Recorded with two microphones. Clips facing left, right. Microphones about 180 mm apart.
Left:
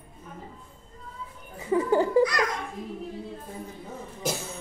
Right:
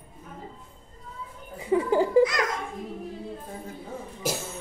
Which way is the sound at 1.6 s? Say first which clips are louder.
Even; 10° right (ahead or behind).